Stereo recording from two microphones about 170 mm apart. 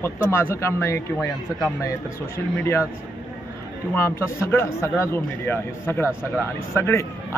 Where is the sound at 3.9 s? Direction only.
15° left (ahead or behind).